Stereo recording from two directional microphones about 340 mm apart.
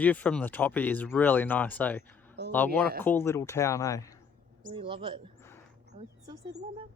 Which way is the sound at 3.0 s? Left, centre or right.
Centre.